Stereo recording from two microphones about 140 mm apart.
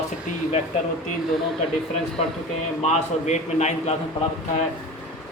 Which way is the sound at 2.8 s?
55° left (ahead or behind).